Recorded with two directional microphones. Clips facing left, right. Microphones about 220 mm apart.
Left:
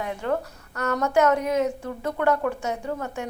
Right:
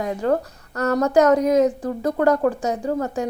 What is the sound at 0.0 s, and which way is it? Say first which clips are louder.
A woman's voice: right 6 dB; 40° right (ahead or behind).